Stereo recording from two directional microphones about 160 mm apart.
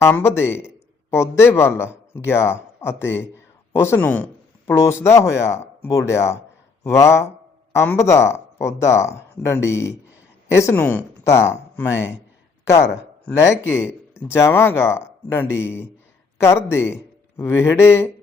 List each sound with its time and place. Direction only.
0.0 s a man's voice: 15° left (ahead or behind)
13.5 s a man's voice: 15° left (ahead or behind)